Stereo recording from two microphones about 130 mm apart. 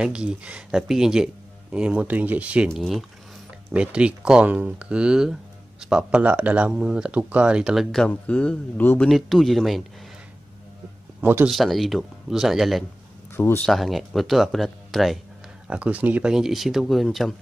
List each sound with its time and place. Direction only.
0.0 s speech: 5° right (ahead or behind)
2.7 s speech: centre (ahead or behind)
9.1 s speech: centre (ahead or behind)
11.1 s speech: 15° right (ahead or behind)
11.4 s speech: centre (ahead or behind)
15.7 s speech: 10° right (ahead or behind)